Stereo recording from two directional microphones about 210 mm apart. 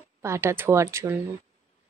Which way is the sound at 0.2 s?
15° right (ahead or behind).